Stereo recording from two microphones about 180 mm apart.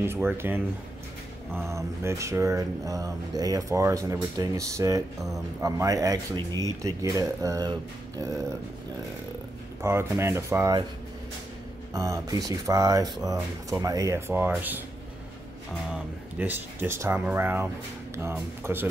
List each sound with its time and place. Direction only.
0.0 s speech: 10° right (ahead or behind)
1.7 s speech: 15° right (ahead or behind)
9.8 s speech: 15° right (ahead or behind)
11.9 s speech: 20° right (ahead or behind)
15.9 s speech: 10° right (ahead or behind)